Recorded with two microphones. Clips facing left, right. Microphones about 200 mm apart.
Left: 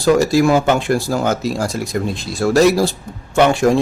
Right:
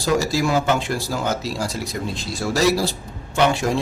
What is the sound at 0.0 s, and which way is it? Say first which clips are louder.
Speech: left 7 dB; 55° left (ahead or behind).